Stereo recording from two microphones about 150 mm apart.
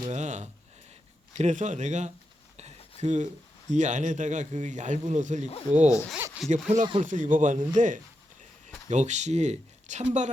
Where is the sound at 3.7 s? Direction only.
55° right (ahead or behind).